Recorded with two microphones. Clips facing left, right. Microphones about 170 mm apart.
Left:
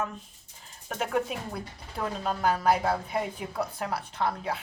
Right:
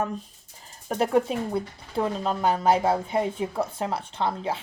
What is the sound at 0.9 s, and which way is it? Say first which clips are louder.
A woman's voice: right 7 dB; 35° right (ahead or behind).